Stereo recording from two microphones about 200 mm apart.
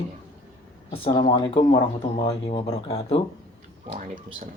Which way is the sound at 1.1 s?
25° left (ahead or behind).